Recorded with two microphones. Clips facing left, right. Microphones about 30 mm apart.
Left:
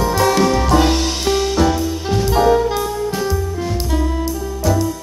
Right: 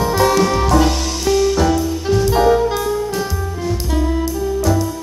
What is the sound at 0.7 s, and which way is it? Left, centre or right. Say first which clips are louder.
Music: left 1 dB; left.